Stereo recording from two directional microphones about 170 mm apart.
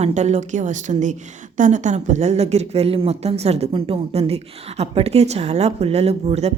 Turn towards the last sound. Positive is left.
turn(degrees=-40)  # may be behind; listen again after turning